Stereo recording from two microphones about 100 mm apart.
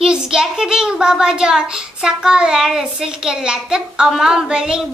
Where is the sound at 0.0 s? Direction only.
5° right (ahead or behind).